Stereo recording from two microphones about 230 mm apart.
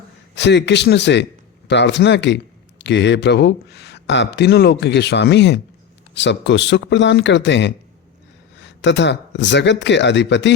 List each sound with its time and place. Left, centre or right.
0.3 s a man's voice: left